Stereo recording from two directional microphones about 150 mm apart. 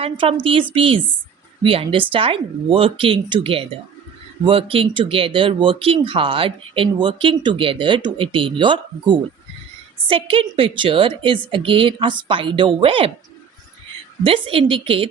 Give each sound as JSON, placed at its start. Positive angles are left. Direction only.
{"t": 0.0, "sound": "speech", "side_deg": -40}
{"t": 14.3, "sound": "speech", "side_deg": -35}